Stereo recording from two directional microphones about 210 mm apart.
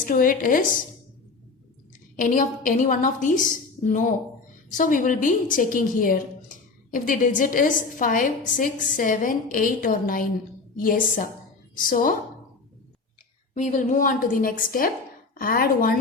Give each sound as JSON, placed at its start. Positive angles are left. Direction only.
{"t": 0.0, "sound": "a woman's voice", "side_deg": 40}
{"t": 2.1, "sound": "a woman's voice", "side_deg": 40}
{"t": 13.5, "sound": "a woman's voice", "side_deg": 35}